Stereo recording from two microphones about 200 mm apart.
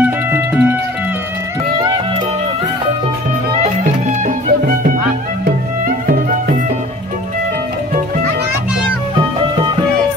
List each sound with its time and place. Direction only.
0.0 s music: 10° right (ahead or behind)
4.5 s music: 45° right (ahead or behind)